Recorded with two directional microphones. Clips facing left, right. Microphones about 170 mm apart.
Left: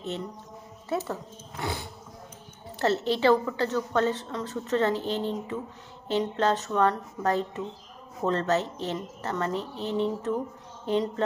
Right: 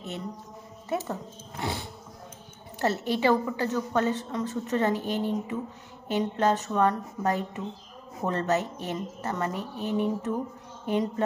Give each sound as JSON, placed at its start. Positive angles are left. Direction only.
{"t": 0.8, "sound": "speech", "side_deg": -15}
{"t": 2.8, "sound": "a woman's voice", "side_deg": -10}